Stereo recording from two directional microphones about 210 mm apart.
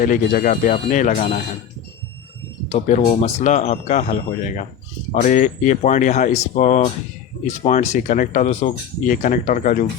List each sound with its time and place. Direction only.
0.0 s speech: 40° left (ahead or behind)
2.6 s speech: 30° left (ahead or behind)